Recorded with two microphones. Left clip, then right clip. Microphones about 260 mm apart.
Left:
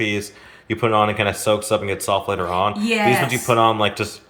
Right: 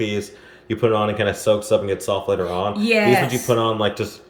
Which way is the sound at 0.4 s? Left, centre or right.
Left.